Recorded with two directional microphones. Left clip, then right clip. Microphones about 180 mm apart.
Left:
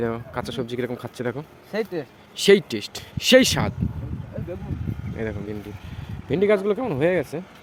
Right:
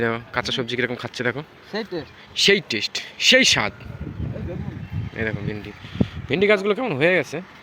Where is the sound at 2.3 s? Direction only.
20° left (ahead or behind).